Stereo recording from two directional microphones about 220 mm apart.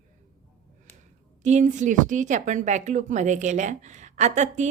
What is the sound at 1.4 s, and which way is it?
A woman's voice, 30° right (ahead or behind).